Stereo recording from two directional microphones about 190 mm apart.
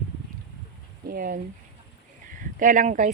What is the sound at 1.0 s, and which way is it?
Speech, 50° right (ahead or behind).